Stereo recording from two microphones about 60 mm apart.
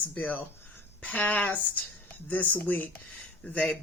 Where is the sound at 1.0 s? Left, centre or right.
Left.